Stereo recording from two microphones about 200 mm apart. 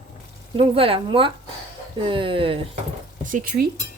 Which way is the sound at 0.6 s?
30° right (ahead or behind).